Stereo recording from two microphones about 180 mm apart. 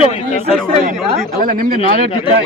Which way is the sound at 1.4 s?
50° right (ahead or behind).